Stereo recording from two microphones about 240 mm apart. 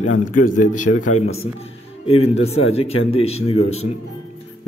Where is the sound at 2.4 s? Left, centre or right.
Left.